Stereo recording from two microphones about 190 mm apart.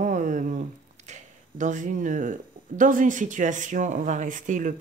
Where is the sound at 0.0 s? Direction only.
40° right (ahead or behind).